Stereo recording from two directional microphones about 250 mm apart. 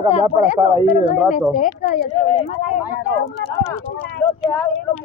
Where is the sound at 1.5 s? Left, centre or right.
Left.